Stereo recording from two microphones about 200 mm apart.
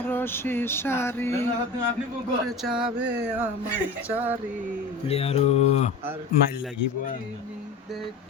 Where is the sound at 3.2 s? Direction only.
5° right (ahead or behind).